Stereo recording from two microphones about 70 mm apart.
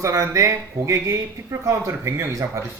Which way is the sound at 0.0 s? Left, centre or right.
Right.